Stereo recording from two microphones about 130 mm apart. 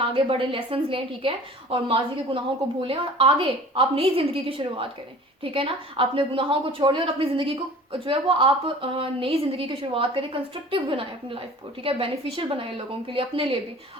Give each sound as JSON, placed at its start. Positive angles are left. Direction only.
{"t": 0.0, "sound": "a woman's voice", "side_deg": -40}